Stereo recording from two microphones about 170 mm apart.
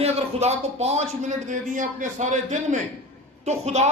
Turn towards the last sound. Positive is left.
turn(degrees=-40)  # may be behind; listen again after turning